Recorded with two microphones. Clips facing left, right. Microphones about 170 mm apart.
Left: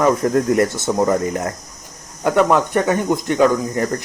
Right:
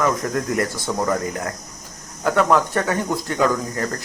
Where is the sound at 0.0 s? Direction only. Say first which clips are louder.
Left 6 dB; 25° left (ahead or behind).